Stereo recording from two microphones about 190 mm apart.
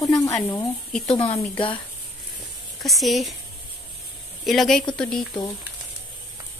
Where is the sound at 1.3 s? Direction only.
25° left (ahead or behind).